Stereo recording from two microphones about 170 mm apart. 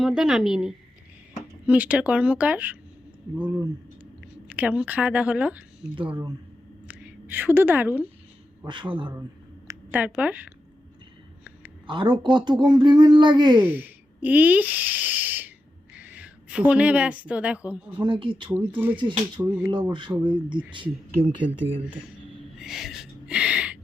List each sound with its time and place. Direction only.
0.0 s a woman's voice: centre (ahead or behind)
6.0 s speech: 25° right (ahead or behind)
6.8 s a sound: 10° right (ahead or behind)
8.6 s speech: 25° right (ahead or behind)
9.6 s a woman's voice: 10° right (ahead or behind)
11.9 s speech: 30° right (ahead or behind)
13.6 s a woman's voice: 10° right (ahead or behind)
18.0 s speech: 30° right (ahead or behind)
18.7 s a woman's voice: 10° right (ahead or behind)
19.9 s speech: 30° right (ahead or behind)
21.2 s speech: 30° right (ahead or behind)
22.5 s a sound: centre (ahead or behind)